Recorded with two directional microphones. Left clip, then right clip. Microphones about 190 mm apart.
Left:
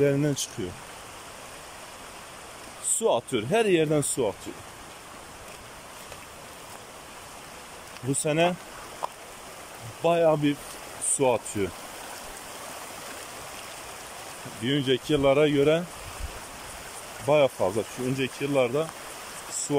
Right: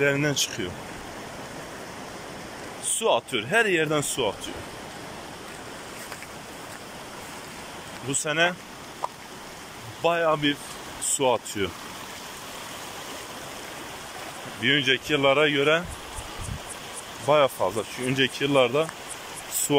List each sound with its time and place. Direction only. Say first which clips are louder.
0.0 s speech: right 2 dB; 15° left (ahead or behind)
3.0 s speech: right 1 dB; 15° left (ahead or behind)
8.1 s speech: right 1 dB; 20° left (ahead or behind)
10.0 s speech: even; 15° left (ahead or behind)
14.6 s speech: right 4 dB; 15° left (ahead or behind)
17.6 s speech: even; centre (ahead or behind)